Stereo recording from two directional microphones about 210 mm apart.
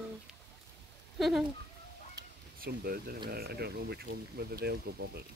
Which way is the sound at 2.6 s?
45° right (ahead or behind).